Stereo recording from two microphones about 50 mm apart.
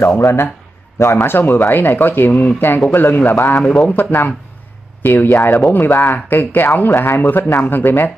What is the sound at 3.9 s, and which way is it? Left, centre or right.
Speech, left.